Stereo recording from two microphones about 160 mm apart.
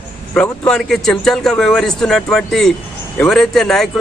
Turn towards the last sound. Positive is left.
turn(degrees=0)  # may be behind; listen again after turning